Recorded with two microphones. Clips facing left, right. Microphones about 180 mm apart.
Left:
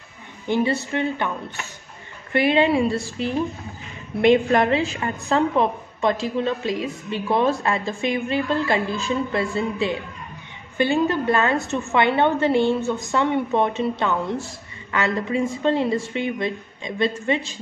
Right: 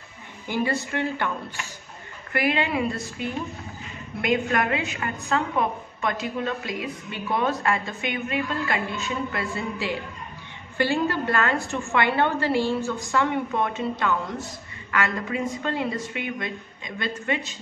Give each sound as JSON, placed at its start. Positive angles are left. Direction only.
{"t": 0.5, "sound": "a woman's voice", "side_deg": 25}
{"t": 2.3, "sound": "a woman's voice", "side_deg": 25}